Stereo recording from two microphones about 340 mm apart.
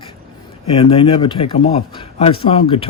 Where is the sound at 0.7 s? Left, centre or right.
Centre.